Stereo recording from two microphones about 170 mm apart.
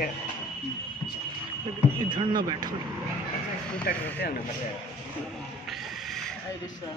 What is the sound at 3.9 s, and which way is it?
Speech, 60° left (ahead or behind).